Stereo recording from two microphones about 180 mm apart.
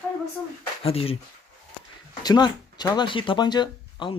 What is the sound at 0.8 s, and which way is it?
Speech, 30° left (ahead or behind).